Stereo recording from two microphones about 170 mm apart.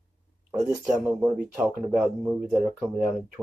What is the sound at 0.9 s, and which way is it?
Speech, 5° right (ahead or behind).